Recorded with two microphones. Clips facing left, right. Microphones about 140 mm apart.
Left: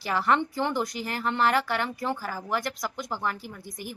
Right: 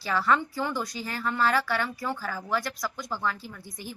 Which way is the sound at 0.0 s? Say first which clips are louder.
Left 1 dB; 20° left (ahead or behind).